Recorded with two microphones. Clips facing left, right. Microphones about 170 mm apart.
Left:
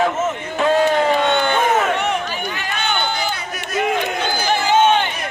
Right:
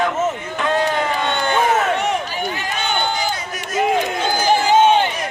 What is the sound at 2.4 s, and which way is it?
Run, 35° right (ahead or behind).